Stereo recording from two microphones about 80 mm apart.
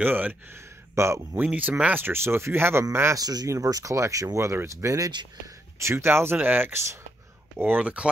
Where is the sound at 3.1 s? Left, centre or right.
Right.